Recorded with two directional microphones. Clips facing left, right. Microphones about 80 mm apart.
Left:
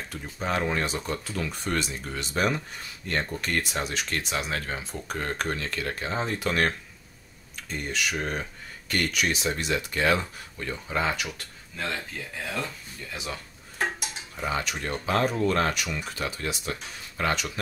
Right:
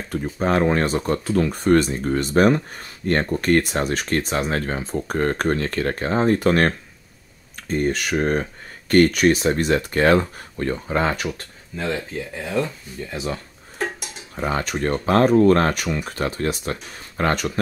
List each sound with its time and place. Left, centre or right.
0.1 s speech: right
11.7 s speech: right
13.1 s speech: right